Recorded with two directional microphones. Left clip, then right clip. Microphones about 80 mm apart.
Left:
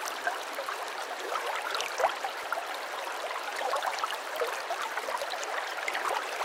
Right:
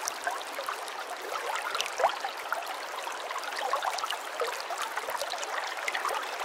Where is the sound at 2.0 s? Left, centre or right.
Right.